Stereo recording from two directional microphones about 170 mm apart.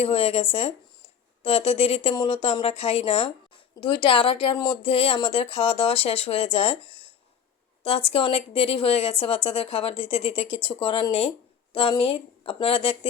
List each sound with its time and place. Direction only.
0.0 s a woman's voice: 35° left (ahead or behind)